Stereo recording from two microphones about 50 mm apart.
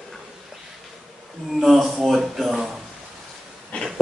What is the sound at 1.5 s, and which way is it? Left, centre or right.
Speech, centre.